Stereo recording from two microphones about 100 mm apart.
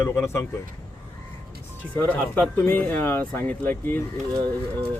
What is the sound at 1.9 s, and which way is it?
Speech, 15° left (ahead or behind).